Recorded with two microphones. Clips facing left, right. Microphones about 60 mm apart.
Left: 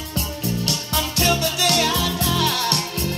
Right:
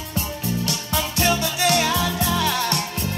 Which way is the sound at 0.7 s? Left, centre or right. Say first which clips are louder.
Even; left.